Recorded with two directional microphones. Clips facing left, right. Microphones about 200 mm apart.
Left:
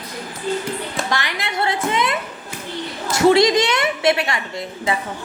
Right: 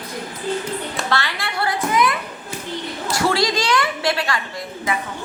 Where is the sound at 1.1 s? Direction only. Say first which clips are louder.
Even; 15° left (ahead or behind).